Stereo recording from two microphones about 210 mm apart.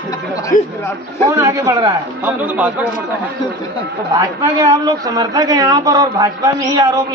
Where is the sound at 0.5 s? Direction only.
40° left (ahead or behind).